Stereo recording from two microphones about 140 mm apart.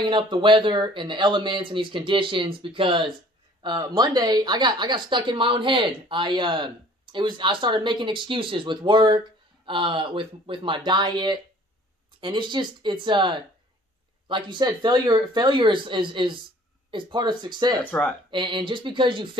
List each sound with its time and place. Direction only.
0.0 s a woman's voice: 35° right (ahead or behind)